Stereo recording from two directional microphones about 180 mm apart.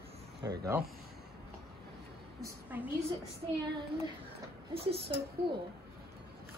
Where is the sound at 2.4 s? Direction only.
10° right (ahead or behind).